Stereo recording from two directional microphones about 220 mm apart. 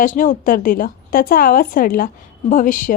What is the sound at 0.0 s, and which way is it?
A woman's voice, 35° left (ahead or behind).